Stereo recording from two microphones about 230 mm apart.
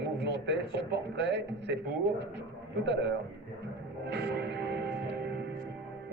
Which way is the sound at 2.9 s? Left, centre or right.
Right.